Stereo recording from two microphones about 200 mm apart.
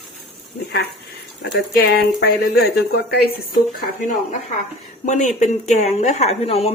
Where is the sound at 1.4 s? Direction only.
50° left (ahead or behind).